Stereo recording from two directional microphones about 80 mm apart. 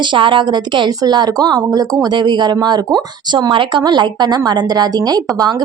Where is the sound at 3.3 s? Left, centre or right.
Right.